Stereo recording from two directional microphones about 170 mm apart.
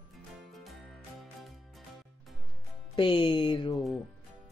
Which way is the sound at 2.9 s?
30° left (ahead or behind).